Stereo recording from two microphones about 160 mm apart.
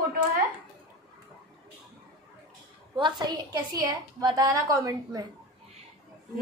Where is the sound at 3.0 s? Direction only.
25° right (ahead or behind).